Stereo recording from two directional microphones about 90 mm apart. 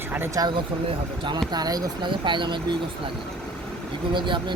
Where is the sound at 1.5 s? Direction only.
45° right (ahead or behind).